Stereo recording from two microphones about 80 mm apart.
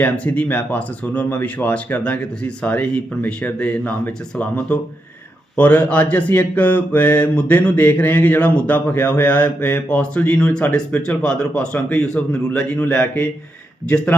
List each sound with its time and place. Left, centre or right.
0.0 s a man's voice: left